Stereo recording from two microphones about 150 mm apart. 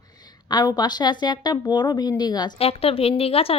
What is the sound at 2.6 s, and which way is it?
Speech, 40° left (ahead or behind).